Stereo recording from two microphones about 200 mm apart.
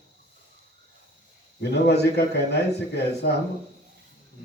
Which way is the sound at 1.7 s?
55° left (ahead or behind).